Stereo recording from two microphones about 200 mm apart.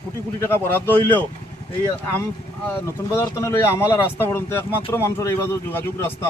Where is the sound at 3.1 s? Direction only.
15° left (ahead or behind).